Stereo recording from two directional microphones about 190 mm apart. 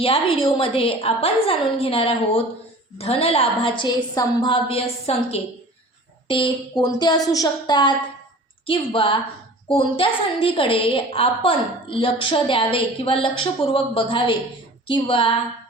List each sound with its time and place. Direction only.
0.0 s a woman's voice: 30° left (ahead or behind)